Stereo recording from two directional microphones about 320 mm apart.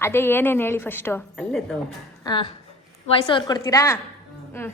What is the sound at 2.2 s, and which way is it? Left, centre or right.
A woman's voice, centre.